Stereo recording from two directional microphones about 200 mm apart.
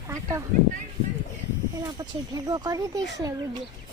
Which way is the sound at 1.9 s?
20° right (ahead or behind).